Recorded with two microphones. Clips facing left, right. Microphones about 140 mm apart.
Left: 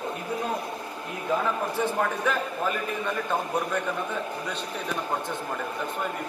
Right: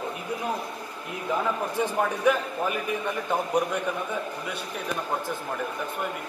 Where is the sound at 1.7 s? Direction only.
15° right (ahead or behind).